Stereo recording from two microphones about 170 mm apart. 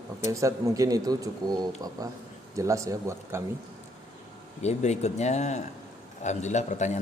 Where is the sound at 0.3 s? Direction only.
20° right (ahead or behind).